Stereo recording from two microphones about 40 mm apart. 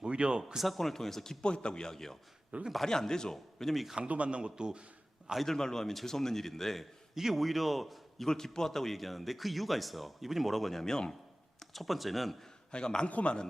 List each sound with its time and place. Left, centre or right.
0.0 s speech: right
0.6 s a man's voice: centre
1.4 s a man's voice: left
3.3 s a man's voice: centre
4.1 s a man's voice: right
5.5 s a man's voice: centre
7.1 s a man's voice: centre
8.3 s a man's voice: centre
11.6 s a man's voice: centre
12.7 s a man's voice: left
13.1 s a man's voice: left